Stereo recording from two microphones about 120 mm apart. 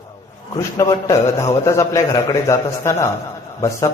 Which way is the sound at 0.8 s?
25° left (ahead or behind).